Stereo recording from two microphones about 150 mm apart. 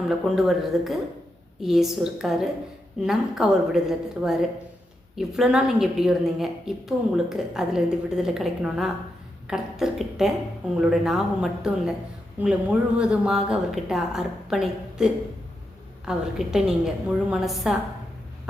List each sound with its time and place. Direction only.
0.3 s a woman's voice: centre (ahead or behind)